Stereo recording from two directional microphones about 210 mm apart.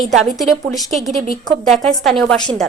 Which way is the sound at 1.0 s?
30° right (ahead or behind).